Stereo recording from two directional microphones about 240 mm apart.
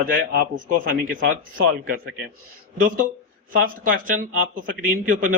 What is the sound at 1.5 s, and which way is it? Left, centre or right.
Speech, right.